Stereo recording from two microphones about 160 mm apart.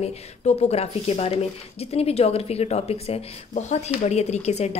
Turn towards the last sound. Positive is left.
turn(degrees=40)  # may be behind; listen again after turning